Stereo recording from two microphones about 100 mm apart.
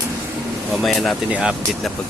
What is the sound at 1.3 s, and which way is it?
Speech, 10° right (ahead or behind).